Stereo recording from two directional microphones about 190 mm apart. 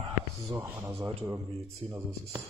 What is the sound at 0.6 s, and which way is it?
Speech, 10° right (ahead or behind).